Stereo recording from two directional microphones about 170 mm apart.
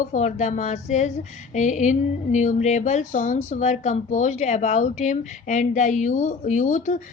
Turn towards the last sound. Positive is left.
turn(degrees=45)  # may be behind; listen again after turning